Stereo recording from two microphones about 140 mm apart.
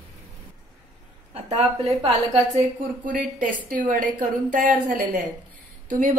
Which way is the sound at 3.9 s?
70° right (ahead or behind).